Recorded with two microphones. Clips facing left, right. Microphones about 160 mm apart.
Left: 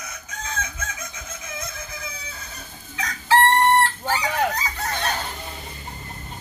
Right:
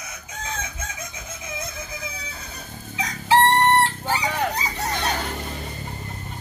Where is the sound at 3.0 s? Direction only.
20° right (ahead or behind).